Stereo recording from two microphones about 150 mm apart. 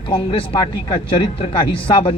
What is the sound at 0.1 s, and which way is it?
Speech, 35° left (ahead or behind).